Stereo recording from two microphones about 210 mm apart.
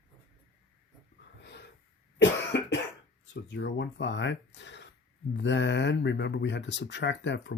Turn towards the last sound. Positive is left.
turn(degrees=55)  # may be behind; listen again after turning